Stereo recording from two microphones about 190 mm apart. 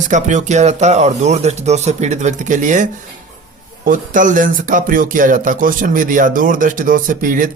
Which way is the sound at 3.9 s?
45° right (ahead or behind).